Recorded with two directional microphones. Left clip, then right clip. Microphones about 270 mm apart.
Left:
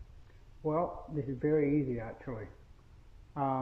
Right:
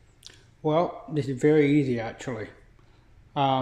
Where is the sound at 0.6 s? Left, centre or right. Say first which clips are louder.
Right 8 dB; right.